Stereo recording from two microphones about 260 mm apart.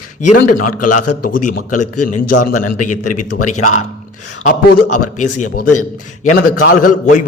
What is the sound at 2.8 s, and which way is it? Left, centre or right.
Speech, left.